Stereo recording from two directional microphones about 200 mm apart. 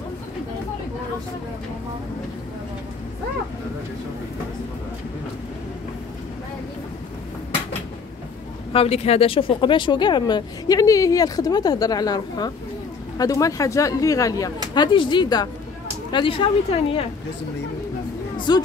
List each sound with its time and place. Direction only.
8.7 s speech: 30° left (ahead or behind)
18.5 s speech: 20° left (ahead or behind)